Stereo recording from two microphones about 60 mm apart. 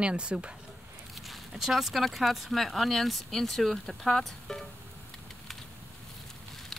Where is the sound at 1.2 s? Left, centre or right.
Centre.